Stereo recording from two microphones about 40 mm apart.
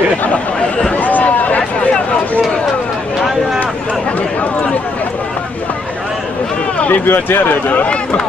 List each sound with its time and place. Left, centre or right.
0.9 s a sound: left
6.9 s speech: left
7.6 s speech: left